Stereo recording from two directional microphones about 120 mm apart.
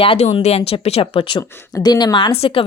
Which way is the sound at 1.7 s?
35° left (ahead or behind).